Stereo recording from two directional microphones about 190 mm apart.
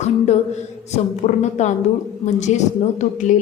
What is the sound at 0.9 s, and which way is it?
A woman's voice, 35° left (ahead or behind).